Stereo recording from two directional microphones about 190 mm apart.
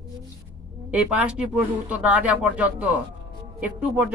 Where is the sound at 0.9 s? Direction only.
5° right (ahead or behind).